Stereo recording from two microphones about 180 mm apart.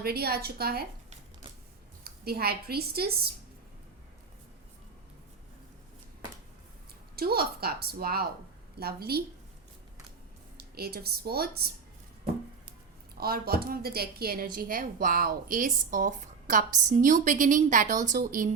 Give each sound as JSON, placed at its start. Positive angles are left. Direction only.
{"t": 0.0, "sound": "a woman's voice", "side_deg": -60}
{"t": 2.0, "sound": "a woman's voice", "side_deg": -60}
{"t": 7.2, "sound": "a woman's voice", "side_deg": -60}
{"t": 10.6, "sound": "a woman's voice", "side_deg": -60}
{"t": 13.1, "sound": "a woman's voice", "side_deg": -55}